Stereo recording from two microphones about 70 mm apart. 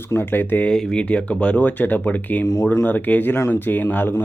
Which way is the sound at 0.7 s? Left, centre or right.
Centre.